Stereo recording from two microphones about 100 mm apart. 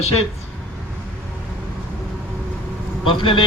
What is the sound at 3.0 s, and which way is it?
Speech, 60° left (ahead or behind).